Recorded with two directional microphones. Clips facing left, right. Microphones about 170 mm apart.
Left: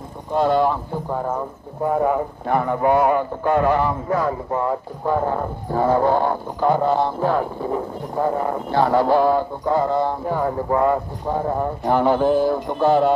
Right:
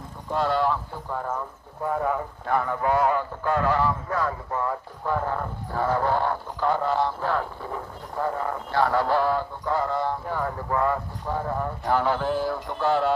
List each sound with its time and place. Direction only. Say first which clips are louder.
0.3 s speech: left 6 dB; 20° left (ahead or behind)